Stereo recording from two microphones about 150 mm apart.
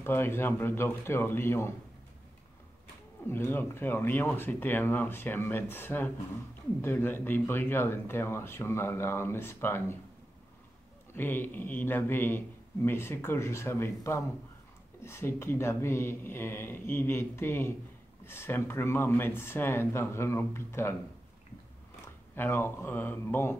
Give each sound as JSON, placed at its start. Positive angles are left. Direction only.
{"t": 0.0, "sound": "speech", "side_deg": 15}
{"t": 3.3, "sound": "speech", "side_deg": 15}
{"t": 11.1, "sound": "speech", "side_deg": 15}
{"t": 22.0, "sound": "speech", "side_deg": 15}